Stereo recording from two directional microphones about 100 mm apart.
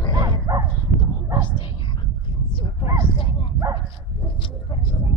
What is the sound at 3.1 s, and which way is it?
Bow-wow, 60° left (ahead or behind).